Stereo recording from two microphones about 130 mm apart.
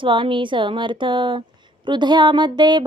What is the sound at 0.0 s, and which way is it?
Music, 40° right (ahead or behind).